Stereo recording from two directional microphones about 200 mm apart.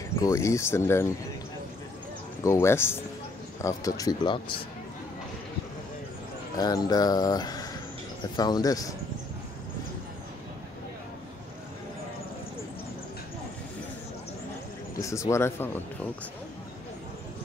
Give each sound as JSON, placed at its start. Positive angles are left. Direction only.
{"t": 0.2, "sound": "speech", "side_deg": 15}
{"t": 2.4, "sound": "speech", "side_deg": 15}
{"t": 6.5, "sound": "speech", "side_deg": 20}
{"t": 15.0, "sound": "speech", "side_deg": 15}